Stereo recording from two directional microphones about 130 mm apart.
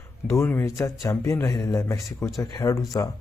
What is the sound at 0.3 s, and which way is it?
Speech, 20° left (ahead or behind).